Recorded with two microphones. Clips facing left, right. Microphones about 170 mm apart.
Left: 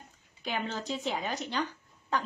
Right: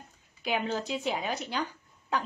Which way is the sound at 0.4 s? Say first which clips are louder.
Right 4 dB; 10° right (ahead or behind).